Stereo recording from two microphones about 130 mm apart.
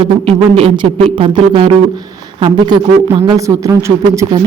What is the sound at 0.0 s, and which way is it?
Speech, 50° right (ahead or behind).